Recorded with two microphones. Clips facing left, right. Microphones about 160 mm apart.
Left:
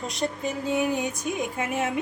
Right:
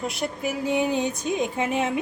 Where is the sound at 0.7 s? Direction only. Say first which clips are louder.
Right 2 dB; 20° right (ahead or behind).